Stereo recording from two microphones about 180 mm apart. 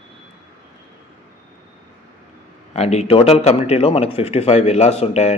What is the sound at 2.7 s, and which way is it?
Speech, 35° left (ahead or behind).